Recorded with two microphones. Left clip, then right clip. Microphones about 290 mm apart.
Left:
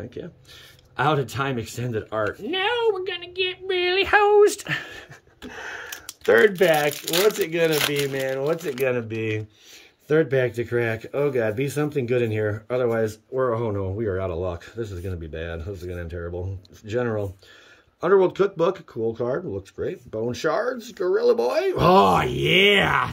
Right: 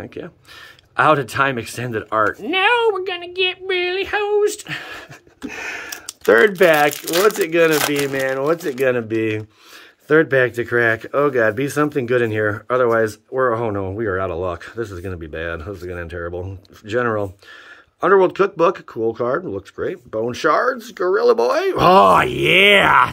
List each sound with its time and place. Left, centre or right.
0.0 s speech: centre
3.9 s speech: centre
5.5 s a sound: right
6.2 s speech: centre